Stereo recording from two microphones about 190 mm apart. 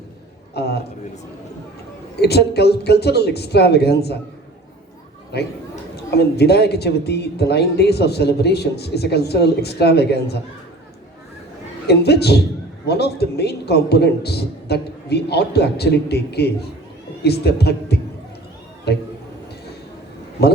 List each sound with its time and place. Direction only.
0.5 s a man's voice: 60° left (ahead or behind)
2.1 s a man's voice: 60° left (ahead or behind)
5.3 s a man's voice: 60° left (ahead or behind)
11.9 s a man's voice: 60° left (ahead or behind)
20.4 s a man's voice: 60° left (ahead or behind)